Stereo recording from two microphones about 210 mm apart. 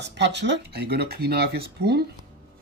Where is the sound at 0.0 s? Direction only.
55° right (ahead or behind).